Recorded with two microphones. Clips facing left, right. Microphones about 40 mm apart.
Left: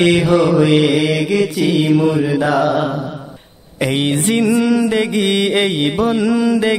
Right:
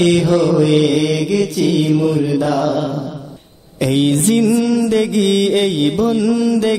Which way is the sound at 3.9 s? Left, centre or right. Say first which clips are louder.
Right 3 dB; centre.